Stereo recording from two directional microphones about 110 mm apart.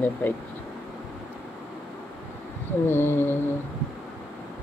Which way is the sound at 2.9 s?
20° left (ahead or behind).